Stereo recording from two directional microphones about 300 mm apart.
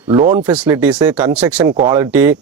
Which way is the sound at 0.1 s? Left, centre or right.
Centre.